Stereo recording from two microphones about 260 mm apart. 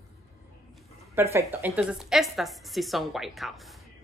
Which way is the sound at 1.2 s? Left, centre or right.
Centre.